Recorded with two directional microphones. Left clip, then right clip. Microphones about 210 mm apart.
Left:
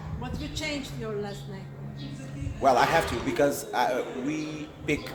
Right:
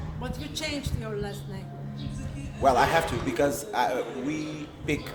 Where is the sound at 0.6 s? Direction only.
60° right (ahead or behind).